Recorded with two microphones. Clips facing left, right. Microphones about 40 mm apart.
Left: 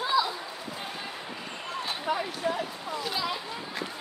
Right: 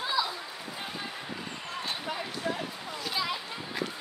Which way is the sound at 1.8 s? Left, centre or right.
Centre.